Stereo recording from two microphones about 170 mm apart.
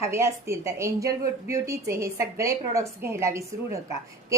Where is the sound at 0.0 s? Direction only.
15° right (ahead or behind).